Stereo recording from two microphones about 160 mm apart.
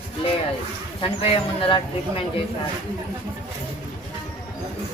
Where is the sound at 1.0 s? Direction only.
35° left (ahead or behind).